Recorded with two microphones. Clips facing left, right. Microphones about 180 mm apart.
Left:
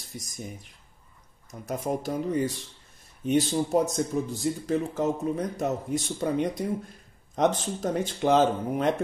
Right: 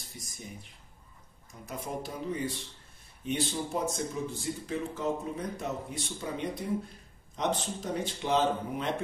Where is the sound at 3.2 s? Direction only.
40° left (ahead or behind).